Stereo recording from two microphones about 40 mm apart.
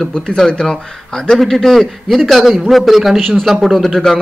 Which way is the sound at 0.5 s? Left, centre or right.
Centre.